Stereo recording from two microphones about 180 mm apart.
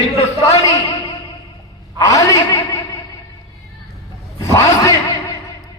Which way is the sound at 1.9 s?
20° left (ahead or behind).